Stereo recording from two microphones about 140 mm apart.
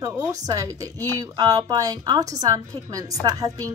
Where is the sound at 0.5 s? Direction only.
25° right (ahead or behind).